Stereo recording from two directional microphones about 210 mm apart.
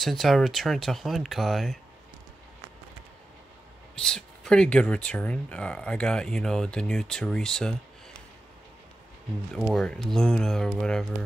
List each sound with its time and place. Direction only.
0.0 s speech: centre (ahead or behind)
3.9 s speech: 5° left (ahead or behind)
9.5 s speech: centre (ahead or behind)